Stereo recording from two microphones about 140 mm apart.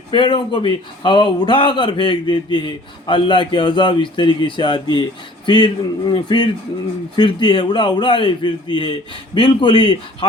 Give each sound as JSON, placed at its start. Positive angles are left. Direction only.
{"t": 0.1, "sound": "speech", "side_deg": 35}